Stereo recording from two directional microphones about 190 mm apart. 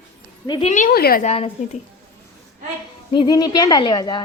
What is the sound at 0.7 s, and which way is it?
Speech, 50° left (ahead or behind).